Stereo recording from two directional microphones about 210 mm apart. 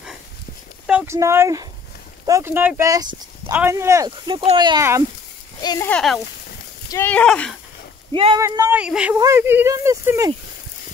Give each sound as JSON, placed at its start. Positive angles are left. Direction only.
{"t": 0.8, "sound": "speech", "side_deg": -10}
{"t": 5.6, "sound": "speech", "side_deg": 20}
{"t": 5.9, "sound": "speech", "side_deg": 0}
{"t": 8.1, "sound": "speech", "side_deg": -25}
{"t": 8.4, "sound": "speech", "side_deg": -15}